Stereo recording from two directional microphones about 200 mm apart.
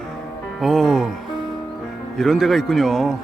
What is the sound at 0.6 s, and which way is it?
Music, centre (ahead or behind).